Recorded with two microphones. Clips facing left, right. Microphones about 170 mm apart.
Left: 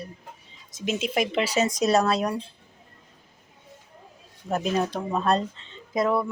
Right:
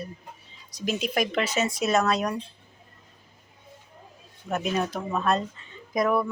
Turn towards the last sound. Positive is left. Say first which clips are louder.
# even
turn(degrees=25)  # may be behind; listen again after turning